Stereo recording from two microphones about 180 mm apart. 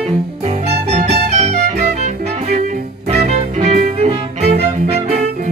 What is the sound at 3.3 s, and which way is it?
Music, 35° right (ahead or behind).